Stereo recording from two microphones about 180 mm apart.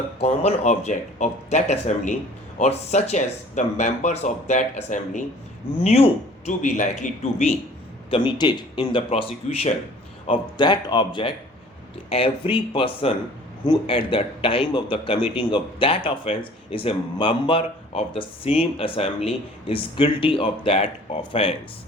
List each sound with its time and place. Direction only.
0.2 s speech: 40° left (ahead or behind)
8.1 s speech: 25° left (ahead or behind)